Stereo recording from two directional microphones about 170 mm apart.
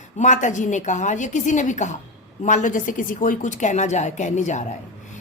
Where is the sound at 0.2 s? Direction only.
45° left (ahead or behind).